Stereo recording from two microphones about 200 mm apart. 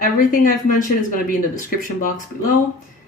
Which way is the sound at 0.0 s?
45° left (ahead or behind).